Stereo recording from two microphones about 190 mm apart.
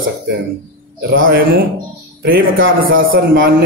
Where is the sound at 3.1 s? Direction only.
50° right (ahead or behind).